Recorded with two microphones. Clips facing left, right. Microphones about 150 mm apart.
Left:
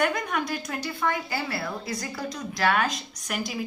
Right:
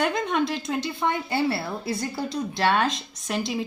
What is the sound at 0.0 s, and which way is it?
A woman's voice, 25° right (ahead or behind).